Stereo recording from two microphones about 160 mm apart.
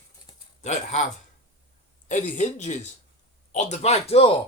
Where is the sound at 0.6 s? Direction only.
50° left (ahead or behind).